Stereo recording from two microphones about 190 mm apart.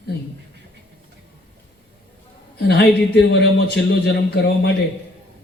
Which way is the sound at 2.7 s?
60° left (ahead or behind).